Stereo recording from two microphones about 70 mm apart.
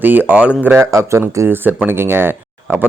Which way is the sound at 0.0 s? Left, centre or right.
Right.